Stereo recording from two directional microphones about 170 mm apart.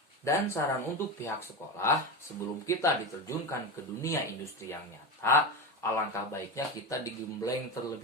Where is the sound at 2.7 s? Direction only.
15° left (ahead or behind).